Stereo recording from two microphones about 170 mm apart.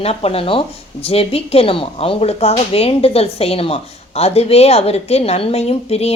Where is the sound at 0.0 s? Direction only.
35° left (ahead or behind).